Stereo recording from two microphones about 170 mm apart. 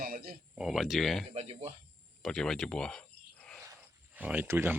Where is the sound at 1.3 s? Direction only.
40° right (ahead or behind).